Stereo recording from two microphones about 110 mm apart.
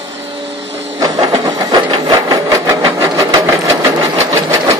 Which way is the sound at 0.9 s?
35° right (ahead or behind).